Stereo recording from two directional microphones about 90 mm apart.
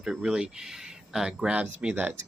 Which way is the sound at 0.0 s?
5° right (ahead or behind).